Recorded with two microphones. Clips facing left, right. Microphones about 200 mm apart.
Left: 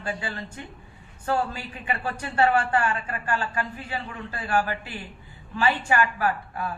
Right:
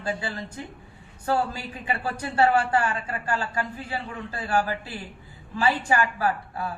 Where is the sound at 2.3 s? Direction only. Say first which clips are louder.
Right 1 dB; 35° right (ahead or behind).